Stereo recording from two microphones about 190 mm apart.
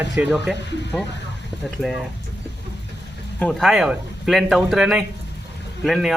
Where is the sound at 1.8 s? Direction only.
Centre (ahead or behind).